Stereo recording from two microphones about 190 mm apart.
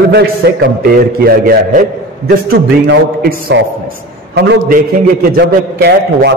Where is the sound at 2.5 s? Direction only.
60° right (ahead or behind).